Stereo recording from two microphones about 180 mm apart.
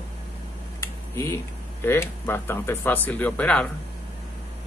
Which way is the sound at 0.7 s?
15° left (ahead or behind).